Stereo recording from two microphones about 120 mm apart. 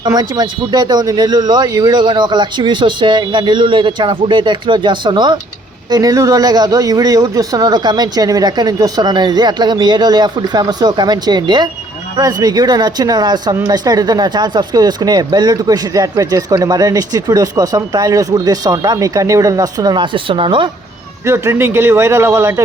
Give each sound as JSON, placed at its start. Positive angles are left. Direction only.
{"t": 0.0, "sound": "speech", "side_deg": -35}
{"t": 21.2, "sound": "a man's voice", "side_deg": -20}